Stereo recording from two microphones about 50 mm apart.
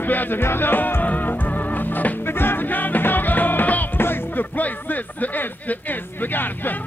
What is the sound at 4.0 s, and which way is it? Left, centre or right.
Speech, left.